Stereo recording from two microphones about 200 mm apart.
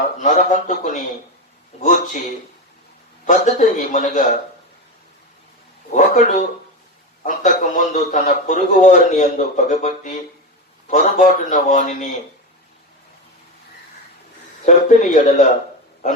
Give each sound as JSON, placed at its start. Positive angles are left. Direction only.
{"t": 0.2, "sound": "a man's voice", "side_deg": 40}
{"t": 3.2, "sound": "a man's voice", "side_deg": 40}
{"t": 5.9, "sound": "a man's voice", "side_deg": 35}
{"t": 14.6, "sound": "a man's voice", "side_deg": 40}